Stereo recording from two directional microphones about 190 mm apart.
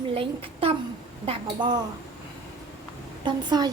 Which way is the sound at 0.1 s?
30° right (ahead or behind).